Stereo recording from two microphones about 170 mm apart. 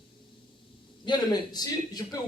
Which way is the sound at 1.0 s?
25° left (ahead or behind).